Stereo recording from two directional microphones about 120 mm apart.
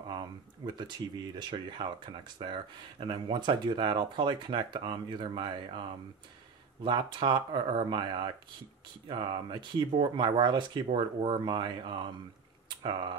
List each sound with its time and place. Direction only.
0.7 s speech: 40° right (ahead or behind)
11.1 s speech: 50° right (ahead or behind)